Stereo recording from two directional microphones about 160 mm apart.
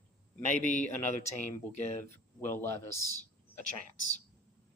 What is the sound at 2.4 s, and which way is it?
Speech, 15° left (ahead or behind).